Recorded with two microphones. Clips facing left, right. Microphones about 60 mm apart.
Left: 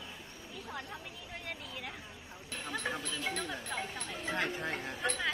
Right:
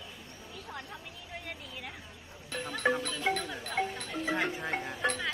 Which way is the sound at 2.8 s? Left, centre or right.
Right.